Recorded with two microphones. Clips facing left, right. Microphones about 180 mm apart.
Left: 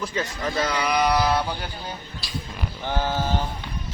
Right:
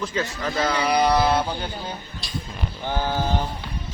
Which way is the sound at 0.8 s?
30° right (ahead or behind).